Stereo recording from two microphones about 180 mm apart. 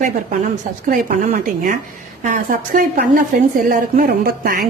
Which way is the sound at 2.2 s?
45° right (ahead or behind).